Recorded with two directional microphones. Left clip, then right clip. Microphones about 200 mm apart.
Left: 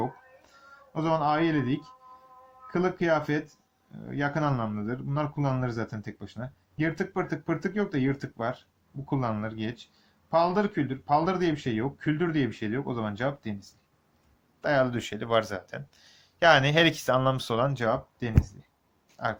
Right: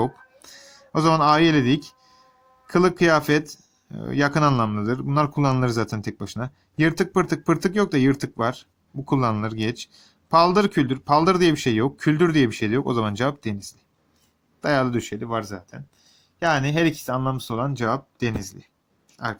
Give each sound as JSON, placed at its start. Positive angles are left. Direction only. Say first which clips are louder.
{"t": 0.9, "sound": "speech", "louder": "right 8 dB", "side_deg": -35}